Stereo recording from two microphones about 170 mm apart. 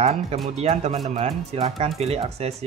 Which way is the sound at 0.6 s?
40° right (ahead or behind).